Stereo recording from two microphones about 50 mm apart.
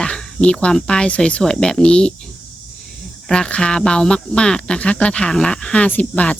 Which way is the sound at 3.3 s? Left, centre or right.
Centre.